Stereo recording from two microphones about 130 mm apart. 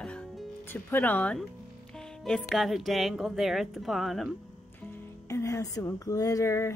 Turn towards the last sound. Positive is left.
turn(degrees=20)  # may be behind; listen again after turning